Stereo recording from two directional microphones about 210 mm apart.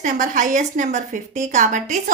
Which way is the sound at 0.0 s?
40° right (ahead or behind).